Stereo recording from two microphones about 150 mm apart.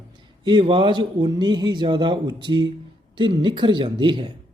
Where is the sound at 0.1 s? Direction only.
35° right (ahead or behind).